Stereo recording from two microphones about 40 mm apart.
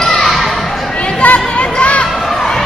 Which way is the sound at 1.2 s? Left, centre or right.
Left.